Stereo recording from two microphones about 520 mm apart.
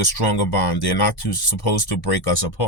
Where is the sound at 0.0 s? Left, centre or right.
Left.